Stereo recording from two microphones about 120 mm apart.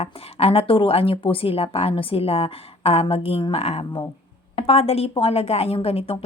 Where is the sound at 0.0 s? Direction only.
55° left (ahead or behind).